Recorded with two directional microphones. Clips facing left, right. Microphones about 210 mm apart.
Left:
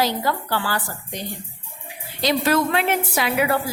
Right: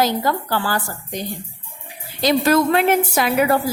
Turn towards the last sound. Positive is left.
turn(degrees=-40)  # may be behind; listen again after turning